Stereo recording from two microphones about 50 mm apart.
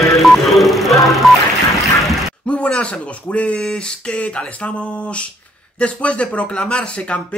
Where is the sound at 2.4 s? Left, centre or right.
Left.